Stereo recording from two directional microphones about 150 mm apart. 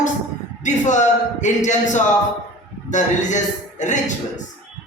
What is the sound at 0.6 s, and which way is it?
A man's voice, 55° left (ahead or behind).